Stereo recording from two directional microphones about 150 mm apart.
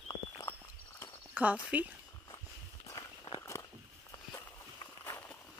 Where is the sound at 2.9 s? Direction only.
25° left (ahead or behind).